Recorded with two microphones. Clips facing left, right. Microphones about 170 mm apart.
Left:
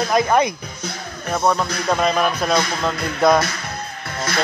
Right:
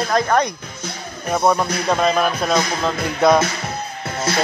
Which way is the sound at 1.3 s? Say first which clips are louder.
Right 2 dB; 10° right (ahead or behind).